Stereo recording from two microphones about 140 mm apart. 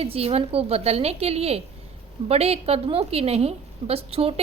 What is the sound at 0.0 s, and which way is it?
A woman's voice, 45° right (ahead or behind).